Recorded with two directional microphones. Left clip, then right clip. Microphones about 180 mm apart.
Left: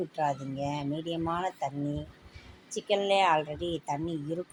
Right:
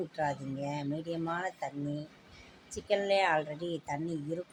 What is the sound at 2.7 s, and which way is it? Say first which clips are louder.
A woman's voice: left 3 dB; 15° left (ahead or behind).